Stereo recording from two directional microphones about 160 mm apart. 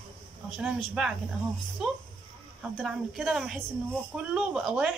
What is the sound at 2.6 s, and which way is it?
A woman's voice, 5° right (ahead or behind).